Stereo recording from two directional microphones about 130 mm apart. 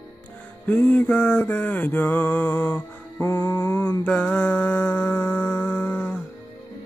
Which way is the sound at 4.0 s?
10° left (ahead or behind).